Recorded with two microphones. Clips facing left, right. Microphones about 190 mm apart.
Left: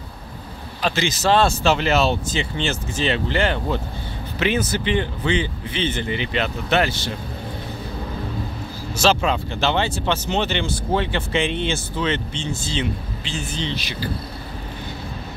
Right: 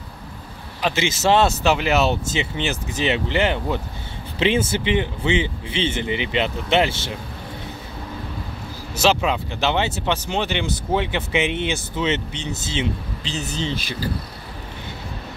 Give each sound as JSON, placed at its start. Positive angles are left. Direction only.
{"t": 0.8, "sound": "speech", "side_deg": -25}
{"t": 8.9, "sound": "vehicle", "side_deg": -20}
{"t": 9.2, "sound": "speech", "side_deg": -15}
{"t": 13.3, "sound": "speech", "side_deg": -40}